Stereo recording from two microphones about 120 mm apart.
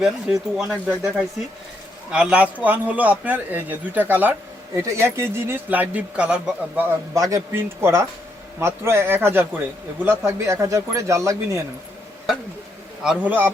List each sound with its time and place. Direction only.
0.0 s speech: 5° right (ahead or behind)
4.7 s speech: 25° right (ahead or behind); by 6.8 s 10° right (ahead or behind)
7.1 s speech: 25° right (ahead or behind)
13.0 s speech: 10° right (ahead or behind)